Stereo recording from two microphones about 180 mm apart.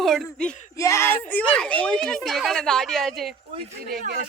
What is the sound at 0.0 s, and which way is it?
Speech, centre (ahead or behind).